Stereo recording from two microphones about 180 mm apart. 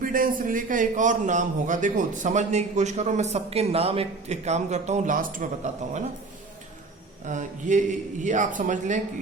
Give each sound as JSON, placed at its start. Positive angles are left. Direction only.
{"t": 0.0, "sound": "a man's voice", "side_deg": -50}
{"t": 7.3, "sound": "a man's voice", "side_deg": -45}